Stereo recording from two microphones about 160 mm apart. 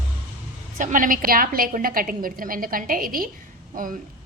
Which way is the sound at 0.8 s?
55° right (ahead or behind).